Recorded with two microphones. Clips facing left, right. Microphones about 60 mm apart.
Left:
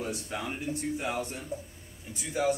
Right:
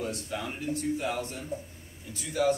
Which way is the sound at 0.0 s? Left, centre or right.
Centre.